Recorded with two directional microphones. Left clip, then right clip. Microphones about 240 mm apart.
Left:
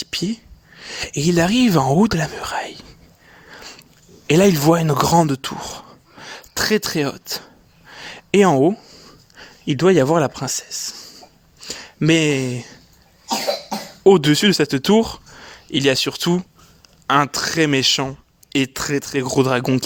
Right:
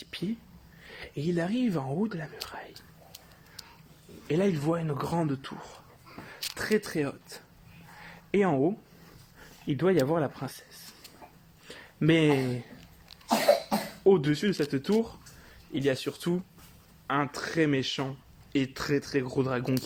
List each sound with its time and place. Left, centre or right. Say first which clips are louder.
0.0 s a sound: left 12 dB; left
0.8 s speech: left 14 dB; left
4.3 s speech: left 14 dB; left
8.0 s a sound: left 12 dB; left
9.6 s speech: left 11 dB; left
14.0 s speech: left 12 dB; left